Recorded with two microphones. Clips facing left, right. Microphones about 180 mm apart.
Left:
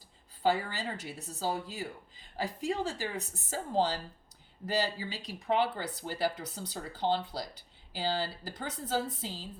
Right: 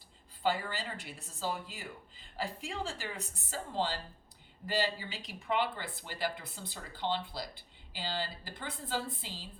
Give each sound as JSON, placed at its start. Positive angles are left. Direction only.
{"t": 0.4, "sound": "speech", "side_deg": 40}